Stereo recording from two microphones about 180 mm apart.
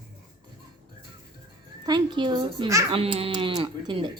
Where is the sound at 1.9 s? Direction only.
25° right (ahead or behind).